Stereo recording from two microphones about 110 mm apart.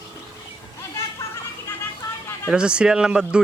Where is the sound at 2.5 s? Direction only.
10° right (ahead or behind).